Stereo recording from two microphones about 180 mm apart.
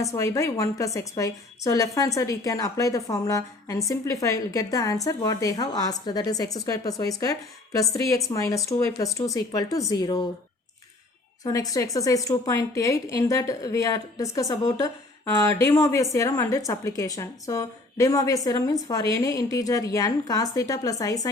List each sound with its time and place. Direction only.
0.0 s a woman's voice: 15° left (ahead or behind)
11.4 s a woman's voice: 20° left (ahead or behind)